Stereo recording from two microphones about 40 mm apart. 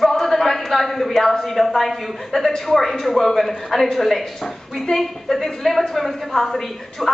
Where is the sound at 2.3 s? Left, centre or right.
Centre.